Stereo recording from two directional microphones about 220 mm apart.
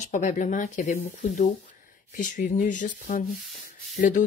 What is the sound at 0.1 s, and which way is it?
Speech, 35° left (ahead or behind).